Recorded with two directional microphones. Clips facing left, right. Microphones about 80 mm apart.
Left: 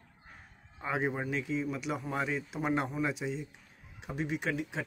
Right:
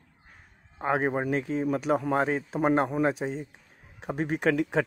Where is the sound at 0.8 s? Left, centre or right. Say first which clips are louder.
Right 7 dB; right.